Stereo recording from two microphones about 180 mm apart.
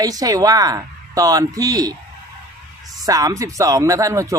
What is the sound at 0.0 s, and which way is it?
Speech, 20° right (ahead or behind).